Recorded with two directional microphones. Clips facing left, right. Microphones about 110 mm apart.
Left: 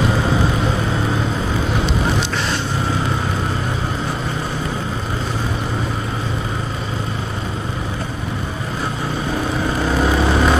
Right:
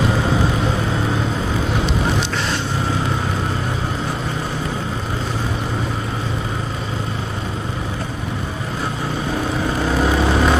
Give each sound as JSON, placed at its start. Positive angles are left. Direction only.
{"t": 10.0, "sound": "vehicle", "side_deg": 15}